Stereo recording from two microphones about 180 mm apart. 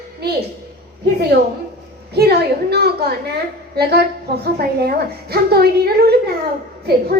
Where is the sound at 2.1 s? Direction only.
65° right (ahead or behind).